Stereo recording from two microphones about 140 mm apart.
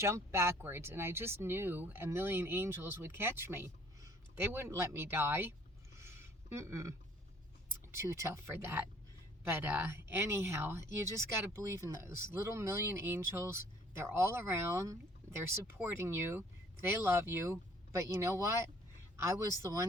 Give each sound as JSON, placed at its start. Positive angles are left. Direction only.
{"t": 0.0, "sound": "speech", "side_deg": -20}
{"t": 6.0, "sound": "a sound", "side_deg": -20}
{"t": 7.9, "sound": "speech", "side_deg": -20}